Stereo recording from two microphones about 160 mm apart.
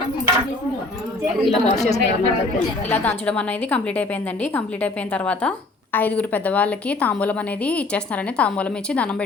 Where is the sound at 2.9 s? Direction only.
10° left (ahead or behind).